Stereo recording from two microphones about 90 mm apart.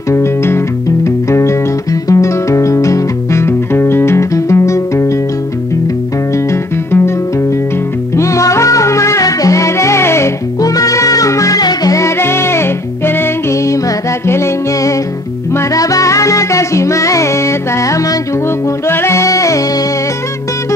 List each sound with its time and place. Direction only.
0.1 s music: 30° left (ahead or behind)
6.3 s music: 30° left (ahead or behind)
8.2 s music: 35° left (ahead or behind)
10.6 s music: 40° left (ahead or behind)
12.0 s music: 30° left (ahead or behind)